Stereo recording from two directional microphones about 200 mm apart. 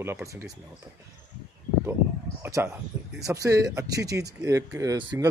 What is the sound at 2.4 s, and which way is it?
Speech, 15° right (ahead or behind).